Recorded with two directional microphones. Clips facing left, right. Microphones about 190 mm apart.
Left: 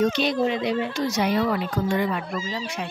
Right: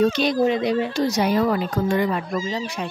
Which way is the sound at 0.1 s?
45° right (ahead or behind).